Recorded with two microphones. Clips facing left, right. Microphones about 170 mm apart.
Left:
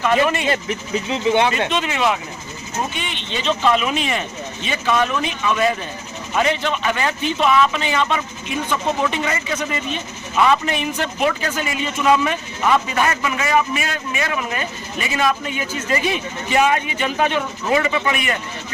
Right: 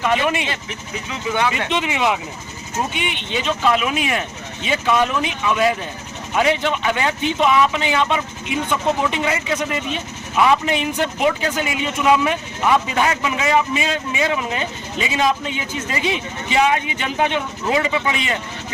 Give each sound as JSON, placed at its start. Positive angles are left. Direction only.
{"t": 0.0, "sound": "a man's voice", "side_deg": -15}
{"t": 0.4, "sound": "speech", "side_deg": 40}
{"t": 1.1, "sound": "speech", "side_deg": 25}
{"t": 1.7, "sound": "a man's voice", "side_deg": -15}